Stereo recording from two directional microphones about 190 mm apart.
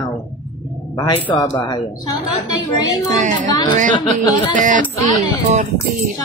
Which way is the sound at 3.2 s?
40° right (ahead or behind).